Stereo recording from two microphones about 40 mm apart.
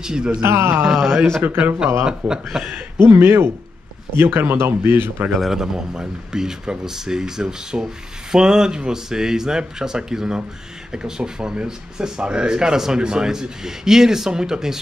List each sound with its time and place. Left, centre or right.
0.0 s speech: right
0.4 s speech: right
1.0 s speech: centre
1.8 s speech: centre
3.2 s speech: right
5.3 s a man's voice: centre
5.6 s speech: centre